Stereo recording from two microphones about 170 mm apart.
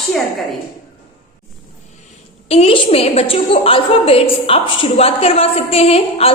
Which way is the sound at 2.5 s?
35° left (ahead or behind).